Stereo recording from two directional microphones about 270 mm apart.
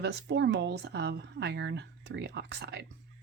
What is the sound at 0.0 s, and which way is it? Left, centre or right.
Speech, right.